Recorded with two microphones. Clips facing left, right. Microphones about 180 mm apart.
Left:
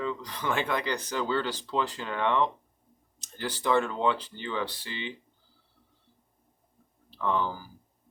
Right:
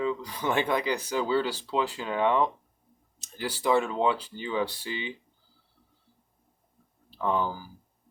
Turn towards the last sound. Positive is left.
turn(degrees=-10)  # may be behind; listen again after turning